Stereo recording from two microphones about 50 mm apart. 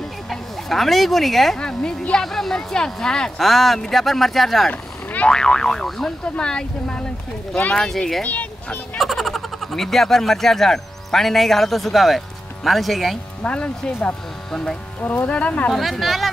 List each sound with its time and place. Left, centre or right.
0.3 s speech: centre
1.6 s boing: centre
2.1 s speech: centre
5.0 s boing: left
5.3 s boing: centre
6.2 s speech: centre
7.9 s speech: centre
8.2 s speech: left
8.9 s speech: centre
13.4 s speech: left
14.5 s boing: centre
15.0 s speech: left
15.2 s speech: left
15.7 s speech: centre